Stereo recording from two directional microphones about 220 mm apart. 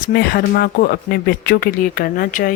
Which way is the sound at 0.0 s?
45° left (ahead or behind).